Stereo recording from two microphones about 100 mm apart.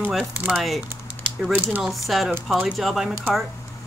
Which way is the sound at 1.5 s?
20° right (ahead or behind).